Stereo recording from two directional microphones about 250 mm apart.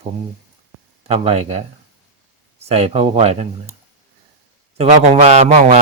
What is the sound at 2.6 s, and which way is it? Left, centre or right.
Speech, right.